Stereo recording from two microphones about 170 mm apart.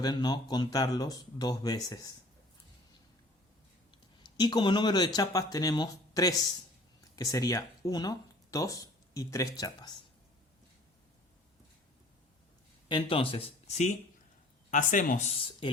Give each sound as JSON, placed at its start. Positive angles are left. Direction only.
{"t": 0.0, "sound": "speech", "side_deg": 25}
{"t": 3.9, "sound": "speech", "side_deg": 25}
{"t": 12.9, "sound": "speech", "side_deg": 30}